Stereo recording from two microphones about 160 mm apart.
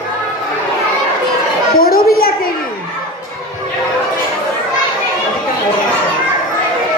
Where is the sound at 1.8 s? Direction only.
70° left (ahead or behind).